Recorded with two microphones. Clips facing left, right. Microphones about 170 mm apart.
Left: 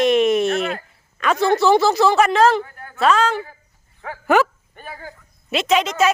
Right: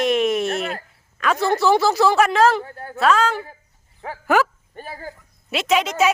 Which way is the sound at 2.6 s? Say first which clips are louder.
Right 2 dB; 35° right (ahead or behind).